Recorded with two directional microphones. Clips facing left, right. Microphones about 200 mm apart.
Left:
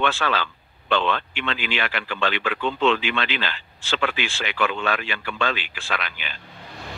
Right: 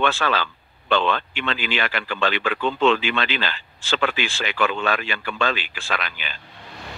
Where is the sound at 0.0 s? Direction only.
40° right (ahead or behind).